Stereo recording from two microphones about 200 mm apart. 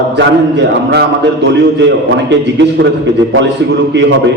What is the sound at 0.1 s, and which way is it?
A man's voice, 60° right (ahead or behind).